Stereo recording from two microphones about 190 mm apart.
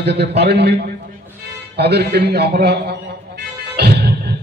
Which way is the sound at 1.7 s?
60° right (ahead or behind).